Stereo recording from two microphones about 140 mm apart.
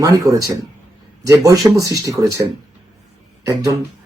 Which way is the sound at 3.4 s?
25° right (ahead or behind).